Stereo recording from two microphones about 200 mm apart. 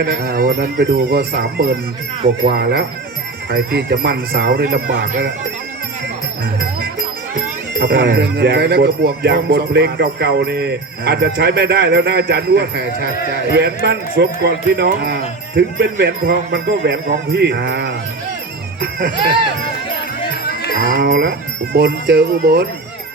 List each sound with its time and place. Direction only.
0.0 s speech: 50° right (ahead or behind)
7.3 s speech: 50° right (ahead or behind)
20.4 s cattle: 50° left (ahead or behind)
20.9 s speech: 45° right (ahead or behind)